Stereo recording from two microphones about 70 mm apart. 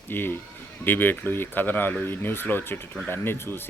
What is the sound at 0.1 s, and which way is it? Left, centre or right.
Speech, left.